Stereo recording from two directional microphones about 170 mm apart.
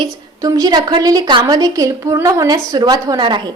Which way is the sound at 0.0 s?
20° right (ahead or behind).